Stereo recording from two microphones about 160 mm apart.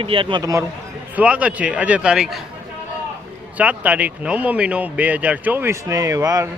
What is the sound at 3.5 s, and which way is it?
A man's voice, 10° right (ahead or behind).